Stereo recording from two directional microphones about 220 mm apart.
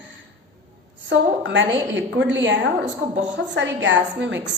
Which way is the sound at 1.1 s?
55° right (ahead or behind).